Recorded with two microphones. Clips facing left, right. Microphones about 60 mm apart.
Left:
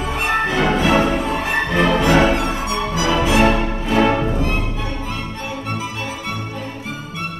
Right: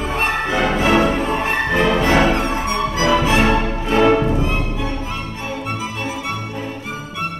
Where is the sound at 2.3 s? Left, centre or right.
Right.